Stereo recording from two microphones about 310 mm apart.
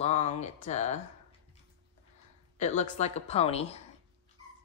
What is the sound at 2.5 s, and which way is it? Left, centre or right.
Speech, left.